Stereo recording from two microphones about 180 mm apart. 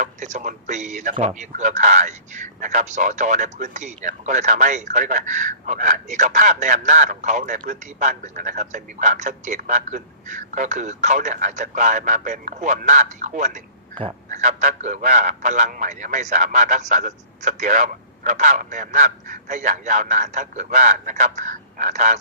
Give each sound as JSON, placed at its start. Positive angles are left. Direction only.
{"t": 0.0, "sound": "speech", "side_deg": -40}